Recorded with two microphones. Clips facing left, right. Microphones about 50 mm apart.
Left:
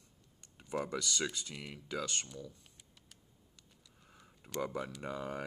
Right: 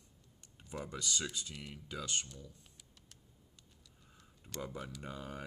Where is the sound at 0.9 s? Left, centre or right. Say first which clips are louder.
Left 2 dB; left.